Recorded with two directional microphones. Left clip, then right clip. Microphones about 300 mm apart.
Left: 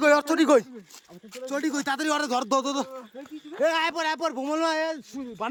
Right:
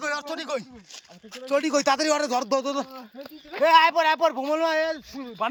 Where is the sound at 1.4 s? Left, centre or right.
Centre.